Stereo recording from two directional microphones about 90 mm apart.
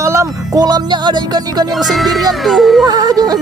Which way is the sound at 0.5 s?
50° right (ahead or behind).